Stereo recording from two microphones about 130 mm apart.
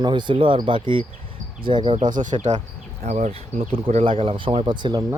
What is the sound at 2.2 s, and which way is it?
Speech, 70° right (ahead or behind).